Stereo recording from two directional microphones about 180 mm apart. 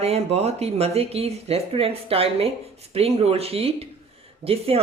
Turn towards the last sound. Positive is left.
turn(degrees=-35)  # may be behind; listen again after turning